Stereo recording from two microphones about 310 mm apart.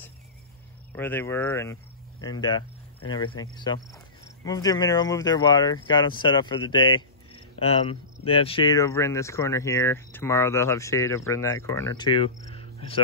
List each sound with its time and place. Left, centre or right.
0.9 s speech: centre
12.5 s cricket: centre